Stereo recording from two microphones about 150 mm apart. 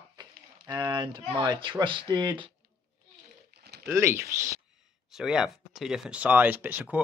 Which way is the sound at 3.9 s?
15° right (ahead or behind).